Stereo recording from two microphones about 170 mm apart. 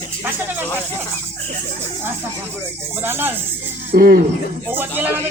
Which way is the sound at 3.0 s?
15° right (ahead or behind).